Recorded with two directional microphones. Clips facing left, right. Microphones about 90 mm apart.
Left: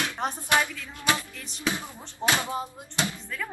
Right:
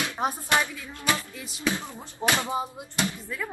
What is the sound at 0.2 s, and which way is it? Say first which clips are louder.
Speech: right 4 dB; 10° right (ahead or behind).